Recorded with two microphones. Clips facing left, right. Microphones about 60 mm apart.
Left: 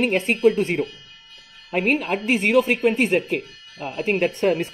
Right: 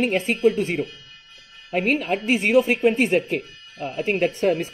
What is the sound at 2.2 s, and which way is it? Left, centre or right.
Speech, centre.